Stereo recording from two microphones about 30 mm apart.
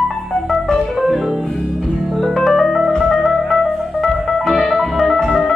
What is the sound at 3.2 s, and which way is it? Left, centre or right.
Music, centre.